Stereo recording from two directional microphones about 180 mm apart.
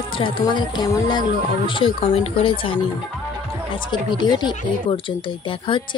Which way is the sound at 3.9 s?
25° left (ahead or behind).